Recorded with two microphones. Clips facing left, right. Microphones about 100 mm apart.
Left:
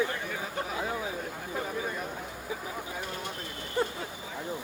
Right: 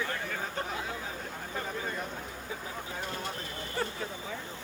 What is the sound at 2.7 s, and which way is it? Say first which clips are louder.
Speech: left 1 dB; 15° left (ahead or behind).